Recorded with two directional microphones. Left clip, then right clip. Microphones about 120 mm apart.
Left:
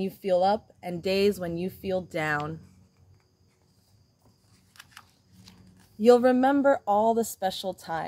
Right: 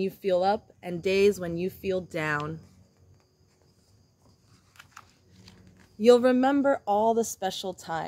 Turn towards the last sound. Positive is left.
turn(degrees=-5)  # may be behind; listen again after turning